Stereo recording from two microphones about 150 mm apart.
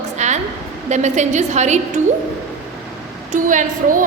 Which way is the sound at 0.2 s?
50° right (ahead or behind).